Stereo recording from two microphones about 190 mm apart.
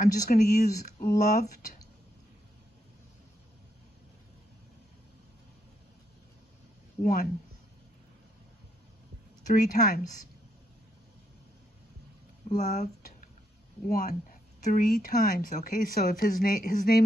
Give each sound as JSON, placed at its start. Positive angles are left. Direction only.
{"t": 0.0, "sound": "speech", "side_deg": 40}
{"t": 7.0, "sound": "speech", "side_deg": 50}
{"t": 9.5, "sound": "speech", "side_deg": 45}
{"t": 12.4, "sound": "speech", "side_deg": 40}